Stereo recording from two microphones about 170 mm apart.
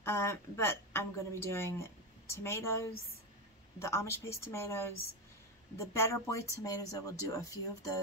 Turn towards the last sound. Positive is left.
turn(degrees=20)  # may be behind; listen again after turning